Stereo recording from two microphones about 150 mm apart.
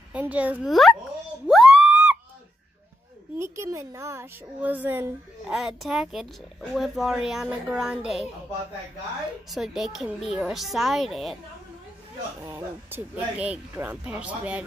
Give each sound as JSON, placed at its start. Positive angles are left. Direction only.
{"t": 0.1, "sound": "a woman's voice", "side_deg": -10}
{"t": 1.5, "sound": "a sound", "side_deg": 0}
{"t": 3.3, "sound": "a woman's voice", "side_deg": -20}
{"t": 5.6, "sound": "a woman's voice", "side_deg": 0}
{"t": 9.5, "sound": "a woman's voice", "side_deg": 0}
{"t": 12.4, "sound": "a woman's voice", "side_deg": -15}